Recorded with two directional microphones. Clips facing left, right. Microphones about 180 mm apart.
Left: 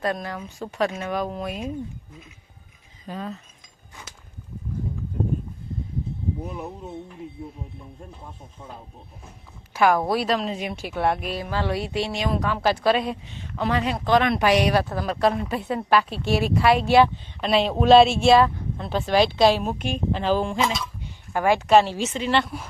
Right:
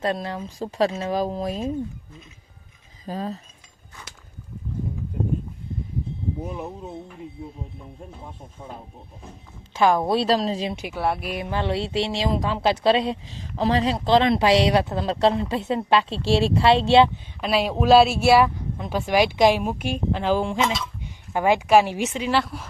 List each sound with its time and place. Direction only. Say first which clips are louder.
0.0 s speech: right 1 dB; 25° right (ahead or behind)
3.1 s cutlery: right 3 dB; 35° right (ahead or behind)
9.7 s speech: right 1 dB; 20° right (ahead or behind)
10.8 s speech: left 4 dB; 5° right (ahead or behind)
11.3 s speech: right 1 dB; 20° right (ahead or behind)
17.4 s speech: left 1 dB; 5° right (ahead or behind)
20.6 s speech: right 1 dB; centre (ahead or behind)
21.3 s speech: even; 20° right (ahead or behind); by 22.7 s centre (ahead or behind)